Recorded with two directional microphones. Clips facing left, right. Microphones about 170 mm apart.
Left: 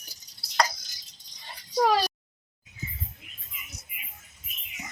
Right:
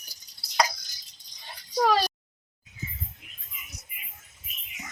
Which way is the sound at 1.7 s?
5° left (ahead or behind).